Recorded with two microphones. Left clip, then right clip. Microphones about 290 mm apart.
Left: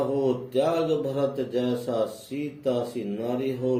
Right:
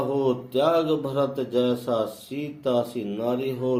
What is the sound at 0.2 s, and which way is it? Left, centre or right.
Speech, right.